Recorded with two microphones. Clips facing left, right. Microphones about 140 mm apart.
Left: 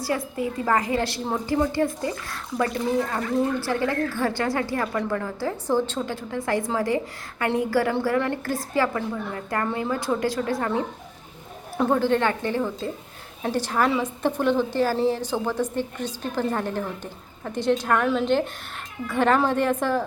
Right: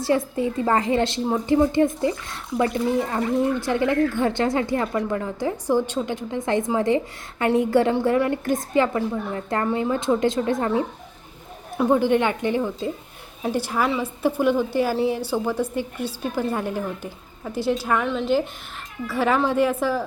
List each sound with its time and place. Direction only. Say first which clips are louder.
0.0 s a woman's voice: right 5 dB; 25° right (ahead or behind); by 20.1 s 5° right (ahead or behind)